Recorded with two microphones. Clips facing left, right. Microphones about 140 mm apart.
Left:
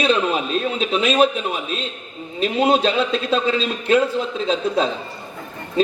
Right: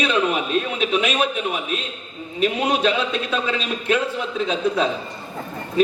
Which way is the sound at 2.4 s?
30° left (ahead or behind).